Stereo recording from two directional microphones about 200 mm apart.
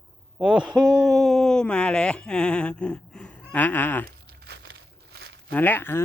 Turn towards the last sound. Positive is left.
turn(degrees=10)  # may be behind; listen again after turning